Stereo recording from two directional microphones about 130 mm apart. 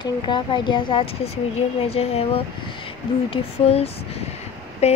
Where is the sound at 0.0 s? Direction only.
35° left (ahead or behind).